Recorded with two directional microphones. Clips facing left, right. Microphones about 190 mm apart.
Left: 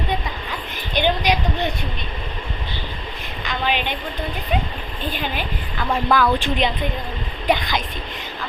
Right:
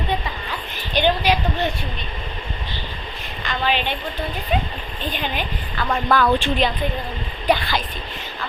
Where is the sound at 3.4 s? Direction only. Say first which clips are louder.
Right 1 dB; 10° left (ahead or behind).